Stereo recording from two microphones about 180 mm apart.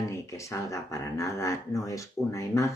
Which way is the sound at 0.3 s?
15° left (ahead or behind).